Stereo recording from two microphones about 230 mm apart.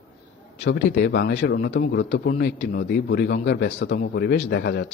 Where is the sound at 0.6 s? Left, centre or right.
Left.